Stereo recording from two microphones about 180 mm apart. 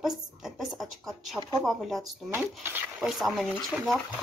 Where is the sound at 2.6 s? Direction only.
10° right (ahead or behind).